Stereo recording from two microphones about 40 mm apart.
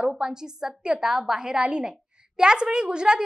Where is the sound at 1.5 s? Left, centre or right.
Right.